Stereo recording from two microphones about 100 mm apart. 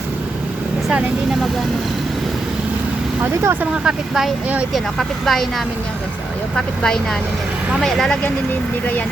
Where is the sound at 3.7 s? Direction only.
10° right (ahead or behind).